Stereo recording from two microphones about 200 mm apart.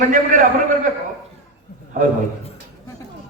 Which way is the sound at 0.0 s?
40° right (ahead or behind).